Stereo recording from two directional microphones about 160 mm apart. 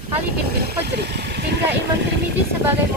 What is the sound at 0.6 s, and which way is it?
Speech, 90° right.